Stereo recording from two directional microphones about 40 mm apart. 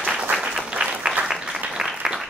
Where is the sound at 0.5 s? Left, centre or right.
Centre.